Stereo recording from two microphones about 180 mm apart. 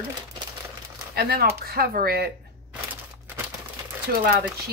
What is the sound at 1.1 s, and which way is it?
Speech, 60° right (ahead or behind).